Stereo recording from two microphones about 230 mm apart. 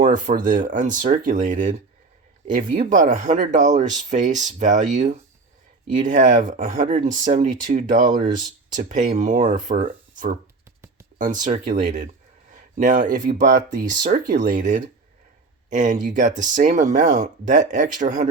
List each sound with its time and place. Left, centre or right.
0.0 s speech: right
5.9 s speech: right